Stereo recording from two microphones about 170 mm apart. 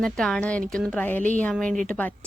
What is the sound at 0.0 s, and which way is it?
Speech, 5° left (ahead or behind).